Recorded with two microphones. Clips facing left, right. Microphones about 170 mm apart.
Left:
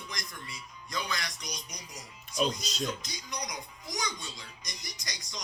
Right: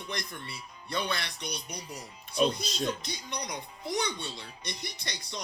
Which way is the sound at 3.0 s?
30° right (ahead or behind).